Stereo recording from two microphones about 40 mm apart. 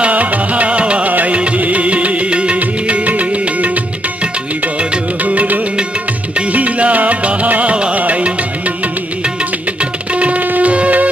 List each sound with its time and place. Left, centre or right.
0.0 s music: right
1.1 s music: right
5.2 s music: right
10.1 s music: right
10.4 s music: right
10.7 s music: right